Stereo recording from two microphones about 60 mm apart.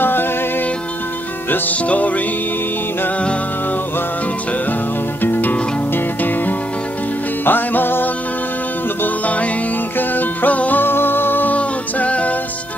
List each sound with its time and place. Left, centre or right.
0.0 s music: left
1.5 s music: left
5.2 s music: left